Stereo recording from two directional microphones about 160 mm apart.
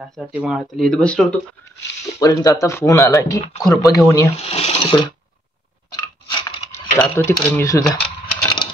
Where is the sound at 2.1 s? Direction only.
20° left (ahead or behind).